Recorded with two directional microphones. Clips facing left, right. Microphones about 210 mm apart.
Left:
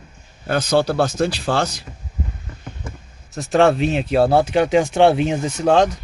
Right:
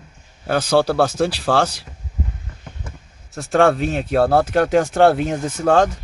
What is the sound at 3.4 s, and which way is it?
A man's voice, centre (ahead or behind).